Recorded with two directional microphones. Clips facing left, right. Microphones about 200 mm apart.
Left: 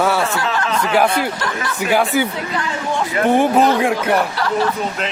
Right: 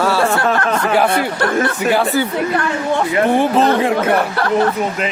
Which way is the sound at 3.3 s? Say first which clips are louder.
Left 2 dB; 15° left (ahead or behind).